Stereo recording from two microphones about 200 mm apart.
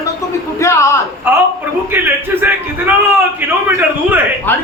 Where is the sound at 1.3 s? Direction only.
10° right (ahead or behind).